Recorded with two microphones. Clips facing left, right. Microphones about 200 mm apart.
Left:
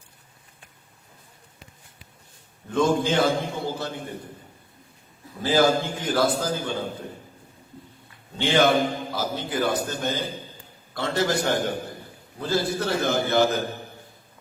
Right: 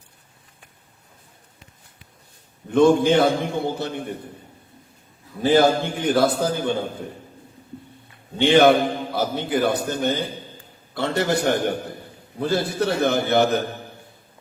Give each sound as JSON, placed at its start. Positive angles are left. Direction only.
{"t": 2.7, "sound": "a man's voice", "side_deg": -60}
{"t": 5.5, "sound": "a man's voice", "side_deg": -60}
{"t": 8.4, "sound": "a man's voice", "side_deg": -60}